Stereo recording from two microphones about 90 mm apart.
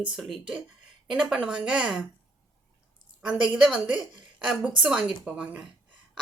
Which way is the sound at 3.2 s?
10° right (ahead or behind).